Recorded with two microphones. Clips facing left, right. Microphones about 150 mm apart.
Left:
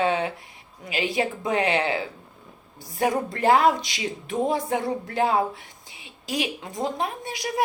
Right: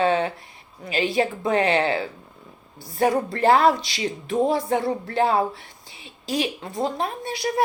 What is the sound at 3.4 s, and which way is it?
A woman's voice, 15° left (ahead or behind).